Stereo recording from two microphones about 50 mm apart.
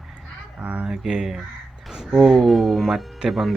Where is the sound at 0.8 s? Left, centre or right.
Centre.